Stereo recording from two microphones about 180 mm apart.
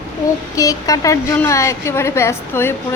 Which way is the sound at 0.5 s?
20° left (ahead or behind).